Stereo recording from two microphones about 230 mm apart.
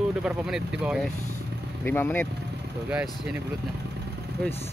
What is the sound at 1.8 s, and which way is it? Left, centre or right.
Speech, centre.